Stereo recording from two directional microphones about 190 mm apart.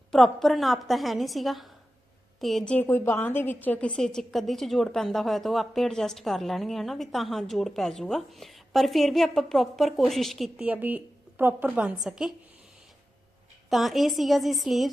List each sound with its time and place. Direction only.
0.1 s a woman's voice: centre (ahead or behind)
13.7 s a woman's voice: centre (ahead or behind)